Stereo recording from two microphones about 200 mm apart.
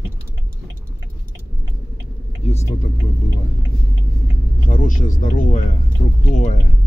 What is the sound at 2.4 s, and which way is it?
Speech, 30° left (ahead or behind).